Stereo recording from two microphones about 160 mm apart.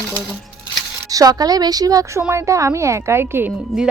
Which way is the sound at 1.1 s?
25° right (ahead or behind).